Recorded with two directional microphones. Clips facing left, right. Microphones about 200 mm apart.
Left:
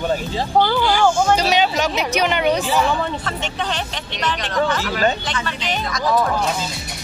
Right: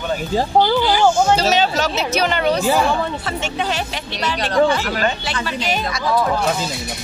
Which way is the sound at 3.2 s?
10° right (ahead or behind).